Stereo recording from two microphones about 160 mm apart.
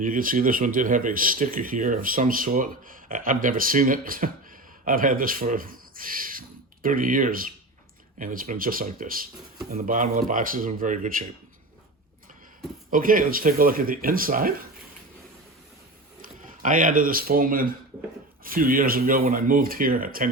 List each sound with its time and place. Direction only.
0.0 s speech: 60° right (ahead or behind)
12.9 s speech: 60° right (ahead or behind)
16.4 s speech: 55° right (ahead or behind)